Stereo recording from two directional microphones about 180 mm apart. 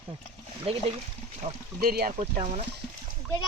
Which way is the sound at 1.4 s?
35° right (ahead or behind).